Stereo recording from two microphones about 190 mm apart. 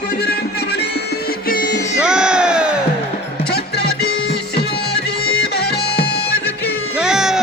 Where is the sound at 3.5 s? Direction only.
60° left (ahead or behind).